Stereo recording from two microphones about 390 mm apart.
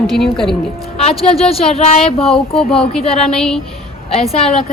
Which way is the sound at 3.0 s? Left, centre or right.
Centre.